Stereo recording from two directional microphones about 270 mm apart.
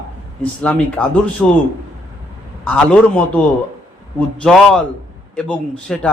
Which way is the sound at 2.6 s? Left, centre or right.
Centre.